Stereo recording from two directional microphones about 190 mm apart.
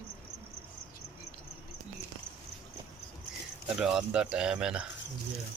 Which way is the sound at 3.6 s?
5° right (ahead or behind).